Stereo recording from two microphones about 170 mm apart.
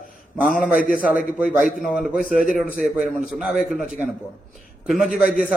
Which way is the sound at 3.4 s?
5° right (ahead or behind).